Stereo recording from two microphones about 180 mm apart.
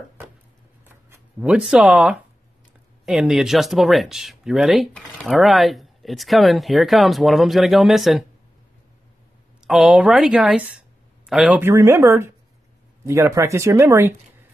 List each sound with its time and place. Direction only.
0.8 s speech: 10° right (ahead or behind)
9.7 s speech: 5° right (ahead or behind)